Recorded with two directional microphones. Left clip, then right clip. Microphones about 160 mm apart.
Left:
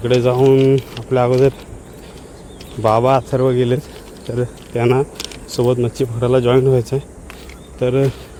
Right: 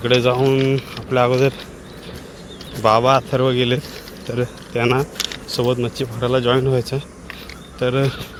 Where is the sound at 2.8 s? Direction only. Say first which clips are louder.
Even; 35° left (ahead or behind).